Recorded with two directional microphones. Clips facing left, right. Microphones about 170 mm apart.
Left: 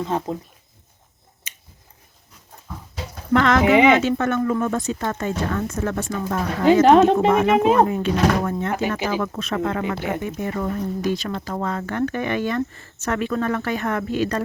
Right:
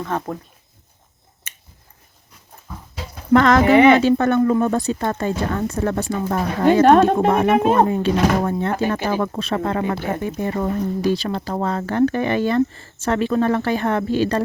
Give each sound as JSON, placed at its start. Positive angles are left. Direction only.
{"t": 0.0, "sound": "speech", "side_deg": 20}
{"t": 3.3, "sound": "speech", "side_deg": -40}
{"t": 3.6, "sound": "speech", "side_deg": 15}
{"t": 4.0, "sound": "speech", "side_deg": -35}